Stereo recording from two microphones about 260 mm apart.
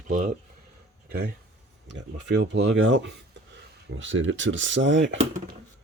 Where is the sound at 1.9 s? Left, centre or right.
Right.